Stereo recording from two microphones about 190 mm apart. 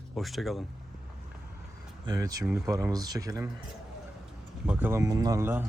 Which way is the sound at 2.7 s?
15° right (ahead or behind).